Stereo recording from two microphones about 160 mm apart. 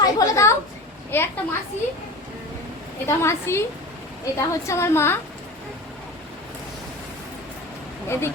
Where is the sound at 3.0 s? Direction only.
15° left (ahead or behind).